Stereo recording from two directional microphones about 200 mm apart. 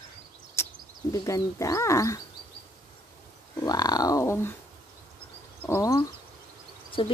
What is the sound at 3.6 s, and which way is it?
Speech, 20° left (ahead or behind).